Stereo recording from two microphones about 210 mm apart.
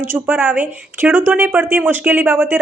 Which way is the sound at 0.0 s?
10° right (ahead or behind).